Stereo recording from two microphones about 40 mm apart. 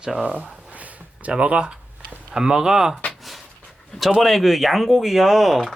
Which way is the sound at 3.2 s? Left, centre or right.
Centre.